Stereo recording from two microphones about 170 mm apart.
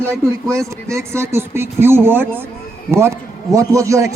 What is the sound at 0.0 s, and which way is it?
A man's voice, 15° right (ahead or behind).